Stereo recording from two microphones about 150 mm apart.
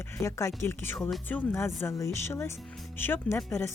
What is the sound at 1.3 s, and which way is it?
Speech, 15° left (ahead or behind).